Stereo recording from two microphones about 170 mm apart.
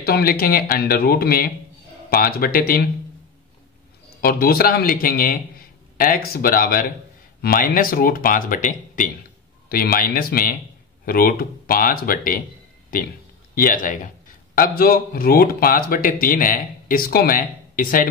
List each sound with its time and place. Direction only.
0.0 s speech: 60° left (ahead or behind)
4.2 s a man's voice: 60° left (ahead or behind)